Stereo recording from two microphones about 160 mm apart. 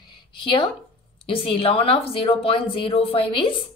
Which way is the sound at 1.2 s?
35° left (ahead or behind).